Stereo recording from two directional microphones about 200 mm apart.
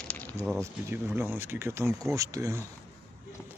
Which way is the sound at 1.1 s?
10° right (ahead or behind).